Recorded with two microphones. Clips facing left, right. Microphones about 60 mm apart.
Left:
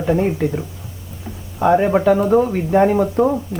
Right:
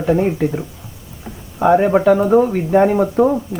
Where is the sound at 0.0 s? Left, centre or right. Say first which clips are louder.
Right 2 dB; centre.